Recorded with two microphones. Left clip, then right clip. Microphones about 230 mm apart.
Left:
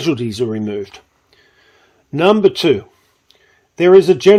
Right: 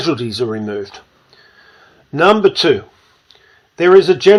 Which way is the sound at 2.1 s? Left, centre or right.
Left.